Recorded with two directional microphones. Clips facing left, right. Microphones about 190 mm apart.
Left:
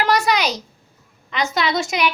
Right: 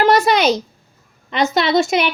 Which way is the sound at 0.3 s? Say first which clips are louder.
Right 5 dB; 25° right (ahead or behind).